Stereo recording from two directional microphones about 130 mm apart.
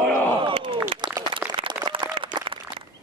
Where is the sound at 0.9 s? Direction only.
35° right (ahead or behind).